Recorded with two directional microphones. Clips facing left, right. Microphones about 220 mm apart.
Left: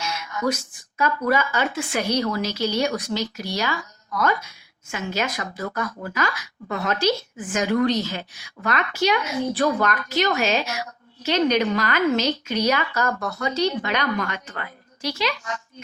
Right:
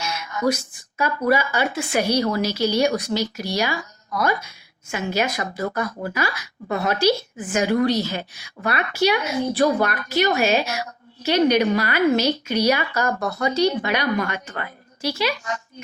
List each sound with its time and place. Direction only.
0.0 s a sound: 10° right (ahead or behind)
1.3 s a woman's voice: 10° right (ahead or behind)
5.5 s speech: 30° right (ahead or behind)
6.1 s a woman's voice: 10° right (ahead or behind)